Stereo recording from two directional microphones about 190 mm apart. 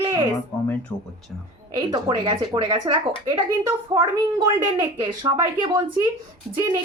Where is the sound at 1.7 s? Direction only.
25° right (ahead or behind).